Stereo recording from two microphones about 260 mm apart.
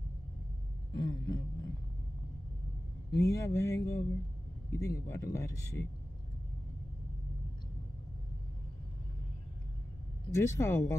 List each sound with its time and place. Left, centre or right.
0.9 s speech: centre
3.1 s speech: centre
10.3 s speech: centre